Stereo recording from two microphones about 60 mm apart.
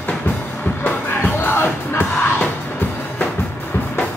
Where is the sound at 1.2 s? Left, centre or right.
Left.